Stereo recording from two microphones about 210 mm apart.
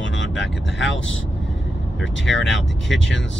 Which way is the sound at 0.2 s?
60° left (ahead or behind).